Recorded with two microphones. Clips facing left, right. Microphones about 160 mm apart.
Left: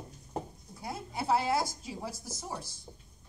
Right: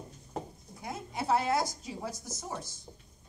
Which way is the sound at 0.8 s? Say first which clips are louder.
Even; 30° left (ahead or behind).